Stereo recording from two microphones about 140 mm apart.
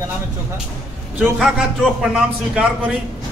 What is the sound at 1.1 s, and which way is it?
A man's voice, 5° right (ahead or behind).